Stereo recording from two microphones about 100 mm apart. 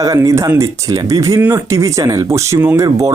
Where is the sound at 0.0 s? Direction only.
35° right (ahead or behind).